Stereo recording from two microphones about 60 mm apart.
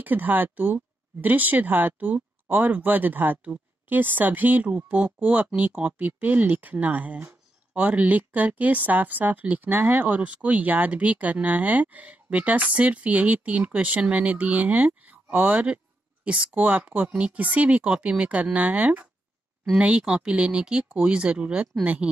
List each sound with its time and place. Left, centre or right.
0.0 s a woman's voice: right